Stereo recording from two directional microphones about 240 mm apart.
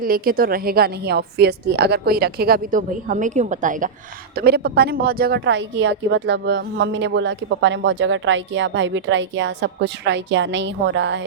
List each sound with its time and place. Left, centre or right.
0.0 s a woman's voice: right